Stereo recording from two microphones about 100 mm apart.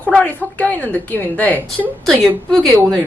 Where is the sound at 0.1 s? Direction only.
15° left (ahead or behind).